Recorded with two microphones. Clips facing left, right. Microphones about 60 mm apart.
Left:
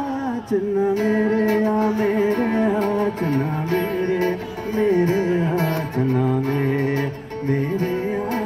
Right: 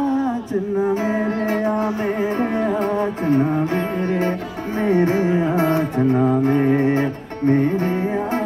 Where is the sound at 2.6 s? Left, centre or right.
Centre.